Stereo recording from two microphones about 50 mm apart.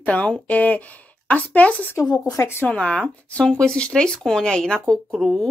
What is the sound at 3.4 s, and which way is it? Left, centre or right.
Speech, centre.